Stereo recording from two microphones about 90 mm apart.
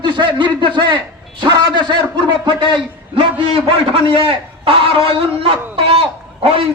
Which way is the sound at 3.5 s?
80° right.